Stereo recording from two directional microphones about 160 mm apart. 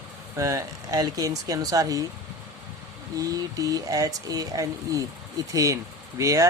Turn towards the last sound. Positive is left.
turn(degrees=-20)  # may be behind; listen again after turning